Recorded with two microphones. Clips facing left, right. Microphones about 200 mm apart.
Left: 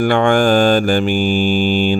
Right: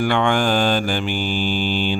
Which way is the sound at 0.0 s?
50° left (ahead or behind).